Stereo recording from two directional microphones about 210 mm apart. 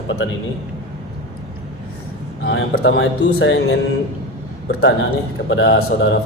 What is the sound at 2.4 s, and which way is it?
Speech, 55° left (ahead or behind).